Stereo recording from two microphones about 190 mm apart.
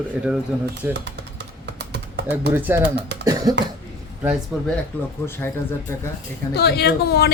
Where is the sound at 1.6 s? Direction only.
65° right (ahead or behind).